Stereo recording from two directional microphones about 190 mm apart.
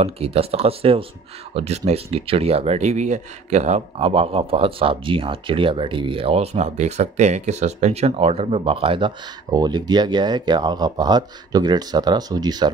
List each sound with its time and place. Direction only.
0.0 s speech: 30° right (ahead or behind)